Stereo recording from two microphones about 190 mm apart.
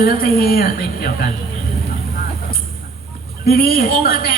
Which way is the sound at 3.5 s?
55° left (ahead or behind).